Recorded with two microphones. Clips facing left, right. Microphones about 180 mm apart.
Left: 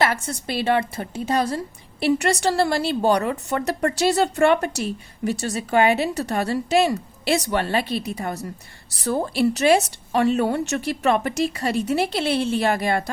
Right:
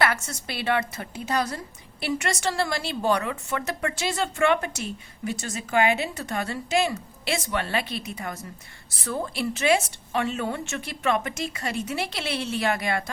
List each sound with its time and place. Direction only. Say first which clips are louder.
0.4 s a woman's voice: left 5 dB; 30° left (ahead or behind)